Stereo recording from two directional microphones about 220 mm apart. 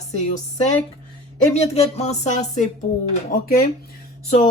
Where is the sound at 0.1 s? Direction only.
30° left (ahead or behind).